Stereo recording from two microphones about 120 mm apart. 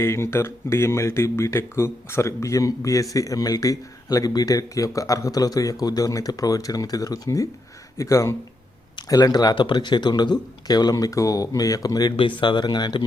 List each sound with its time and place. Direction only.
0.0 s speech: 20° left (ahead or behind)
12.1 s speech: 45° left (ahead or behind)